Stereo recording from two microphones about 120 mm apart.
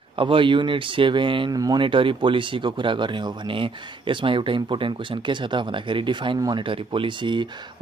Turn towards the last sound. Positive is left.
turn(degrees=-40)  # may be behind; listen again after turning